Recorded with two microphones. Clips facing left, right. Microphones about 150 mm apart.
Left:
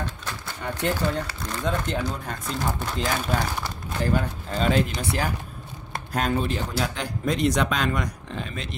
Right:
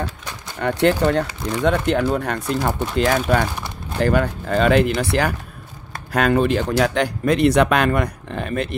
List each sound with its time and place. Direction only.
0.6 s speech: 75° right (ahead or behind); by 8.6 s 60° right (ahead or behind)